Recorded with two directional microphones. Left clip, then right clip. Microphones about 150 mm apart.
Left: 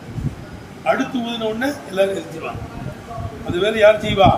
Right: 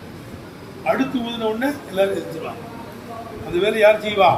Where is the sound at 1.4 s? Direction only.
15° left (ahead or behind).